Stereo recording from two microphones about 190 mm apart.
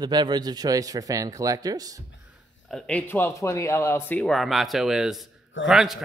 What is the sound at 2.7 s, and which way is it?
A man's voice, 5° left (ahead or behind).